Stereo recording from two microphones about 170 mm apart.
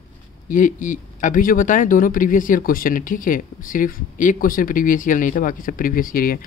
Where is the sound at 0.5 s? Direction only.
50° left (ahead or behind).